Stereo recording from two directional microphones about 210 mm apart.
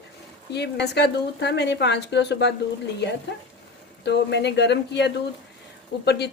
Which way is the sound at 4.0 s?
55° left (ahead or behind).